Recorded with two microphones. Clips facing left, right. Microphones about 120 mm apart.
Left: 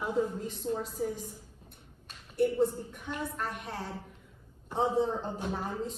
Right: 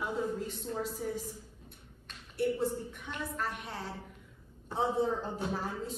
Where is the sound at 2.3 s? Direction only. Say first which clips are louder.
Left 4 dB; centre (ahead or behind).